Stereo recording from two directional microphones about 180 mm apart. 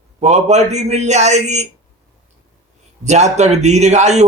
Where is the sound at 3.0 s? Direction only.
40° right (ahead or behind).